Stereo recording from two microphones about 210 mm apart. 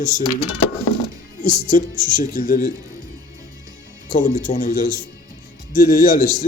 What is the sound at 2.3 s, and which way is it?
Speech, 40° left (ahead or behind).